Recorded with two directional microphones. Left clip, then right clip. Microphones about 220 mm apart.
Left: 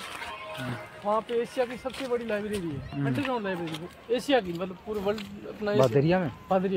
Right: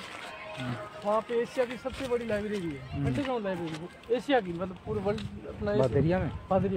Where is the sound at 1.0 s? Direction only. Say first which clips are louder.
Left 1 dB; 35° left (ahead or behind).